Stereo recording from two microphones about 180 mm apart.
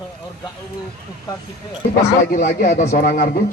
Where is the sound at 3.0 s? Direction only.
50° left (ahead or behind).